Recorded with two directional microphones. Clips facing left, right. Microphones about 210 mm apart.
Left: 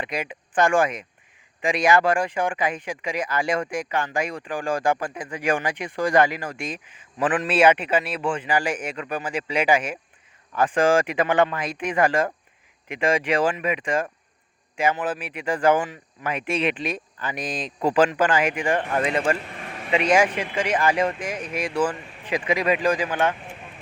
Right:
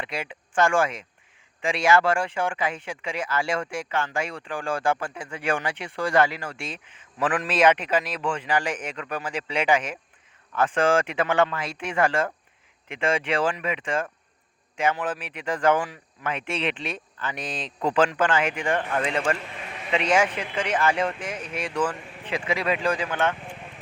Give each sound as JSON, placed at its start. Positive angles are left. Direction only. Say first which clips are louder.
{"t": 0.0, "sound": "speech", "louder": "left 3 dB", "side_deg": 15}